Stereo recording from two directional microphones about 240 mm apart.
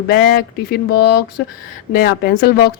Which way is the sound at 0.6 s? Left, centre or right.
Left.